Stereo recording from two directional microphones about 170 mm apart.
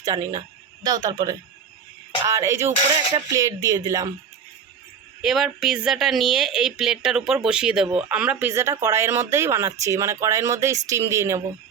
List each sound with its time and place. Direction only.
0.0 s a woman's voice: 20° right (ahead or behind)
5.2 s speech: centre (ahead or behind); by 11.4 s 15° right (ahead or behind)